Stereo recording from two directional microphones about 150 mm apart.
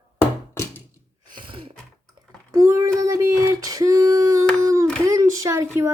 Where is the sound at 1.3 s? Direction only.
35° right (ahead or behind).